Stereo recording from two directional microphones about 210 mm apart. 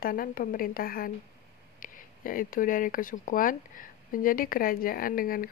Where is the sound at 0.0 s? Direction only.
40° left (ahead or behind).